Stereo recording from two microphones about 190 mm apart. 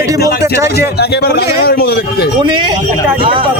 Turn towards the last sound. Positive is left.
turn(degrees=-25)  # may be behind; listen again after turning